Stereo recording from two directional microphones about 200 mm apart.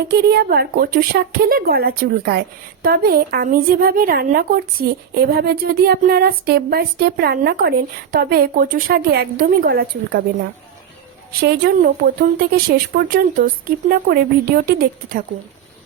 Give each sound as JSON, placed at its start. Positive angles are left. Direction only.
{"t": 0.1, "sound": "a woman's voice", "side_deg": -55}
{"t": 11.3, "sound": "a woman's voice", "side_deg": -50}